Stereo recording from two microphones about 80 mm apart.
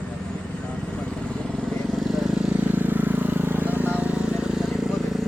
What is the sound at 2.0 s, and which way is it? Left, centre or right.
Vehicle, centre.